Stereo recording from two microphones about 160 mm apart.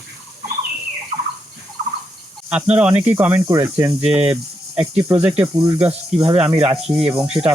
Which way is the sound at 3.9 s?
40° right (ahead or behind).